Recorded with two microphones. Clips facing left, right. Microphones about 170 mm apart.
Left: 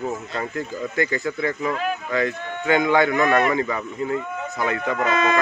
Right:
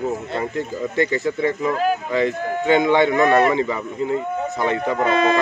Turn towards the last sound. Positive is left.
turn(degrees=-30)  # may be behind; listen again after turning